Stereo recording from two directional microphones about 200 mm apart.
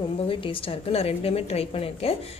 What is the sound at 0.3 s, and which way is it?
A woman's voice, 25° left (ahead or behind).